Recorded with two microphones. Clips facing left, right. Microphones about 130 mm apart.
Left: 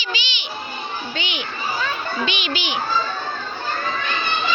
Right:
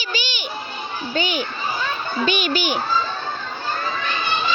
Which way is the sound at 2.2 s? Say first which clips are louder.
Right 5 dB; 45° right (ahead or behind).